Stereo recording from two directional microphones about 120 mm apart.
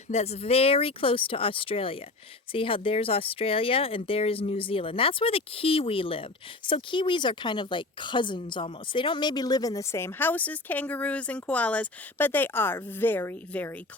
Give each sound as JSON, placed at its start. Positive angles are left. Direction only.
{"t": 0.1, "sound": "a woman's voice", "side_deg": 60}